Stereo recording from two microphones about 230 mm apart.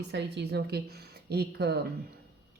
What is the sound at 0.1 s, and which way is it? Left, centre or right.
A woman's voice, right.